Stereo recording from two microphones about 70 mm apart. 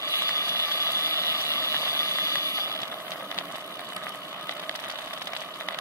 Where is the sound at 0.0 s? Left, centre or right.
Left.